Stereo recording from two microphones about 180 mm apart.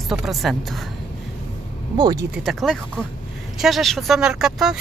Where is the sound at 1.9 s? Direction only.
20° right (ahead or behind).